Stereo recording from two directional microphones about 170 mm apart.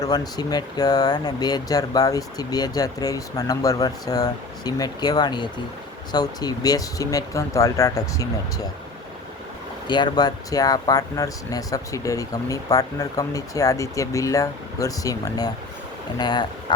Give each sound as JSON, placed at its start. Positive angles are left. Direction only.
{"t": 0.0, "sound": "speech", "side_deg": 25}
{"t": 9.8, "sound": "speech", "side_deg": 25}